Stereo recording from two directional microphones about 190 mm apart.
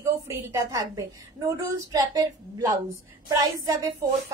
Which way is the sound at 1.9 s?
20° right (ahead or behind).